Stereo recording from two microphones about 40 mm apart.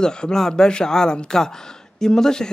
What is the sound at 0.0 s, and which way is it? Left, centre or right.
Speech, centre.